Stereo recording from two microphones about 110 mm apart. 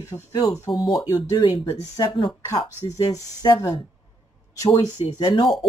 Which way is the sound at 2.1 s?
50° left (ahead or behind).